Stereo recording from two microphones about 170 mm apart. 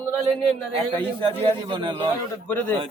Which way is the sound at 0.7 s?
30° right (ahead or behind).